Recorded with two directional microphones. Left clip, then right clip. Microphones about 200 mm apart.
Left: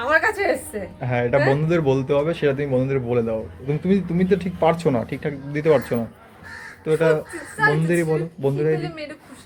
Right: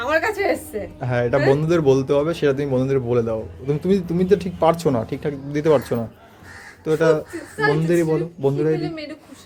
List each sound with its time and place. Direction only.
0.0 s a woman's voice: 10° right (ahead or behind)